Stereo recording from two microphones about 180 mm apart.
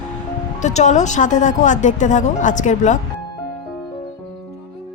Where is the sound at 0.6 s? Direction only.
40° left (ahead or behind).